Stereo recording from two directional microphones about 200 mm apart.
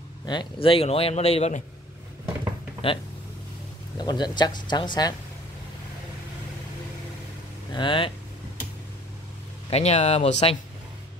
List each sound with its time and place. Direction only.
0.3 s speech: 25° left (ahead or behind)
2.8 s speech: 30° left (ahead or behind)
4.0 s speech: 20° left (ahead or behind)
7.7 s speech: 25° left (ahead or behind)
9.7 s speech: 30° left (ahead or behind)